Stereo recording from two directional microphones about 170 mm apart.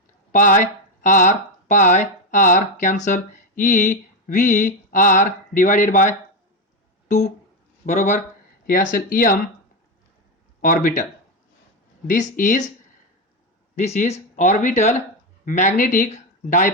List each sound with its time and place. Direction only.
0.3 s speech: 50° left (ahead or behind)
8.6 s speech: 55° left (ahead or behind)
12.0 s speech: 50° left (ahead or behind)
13.7 s speech: 40° left (ahead or behind)